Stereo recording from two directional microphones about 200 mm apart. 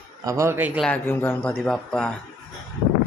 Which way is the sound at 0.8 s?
5° left (ahead or behind).